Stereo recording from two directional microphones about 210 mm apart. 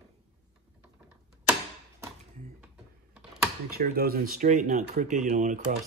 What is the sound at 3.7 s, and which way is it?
Speech, 45° right (ahead or behind).